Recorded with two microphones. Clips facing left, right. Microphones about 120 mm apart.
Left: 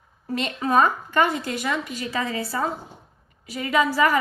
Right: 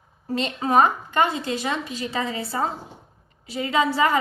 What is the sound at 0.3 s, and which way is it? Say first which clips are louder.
A woman's voice: right 1 dB; 25° right (ahead or behind).